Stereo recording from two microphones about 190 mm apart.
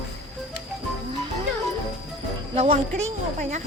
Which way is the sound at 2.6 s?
35° right (ahead or behind).